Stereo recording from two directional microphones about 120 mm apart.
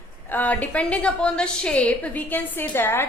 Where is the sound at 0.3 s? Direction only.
15° left (ahead or behind).